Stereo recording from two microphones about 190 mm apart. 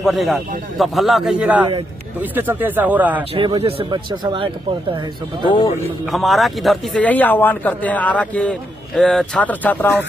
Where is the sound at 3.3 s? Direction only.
25° right (ahead or behind).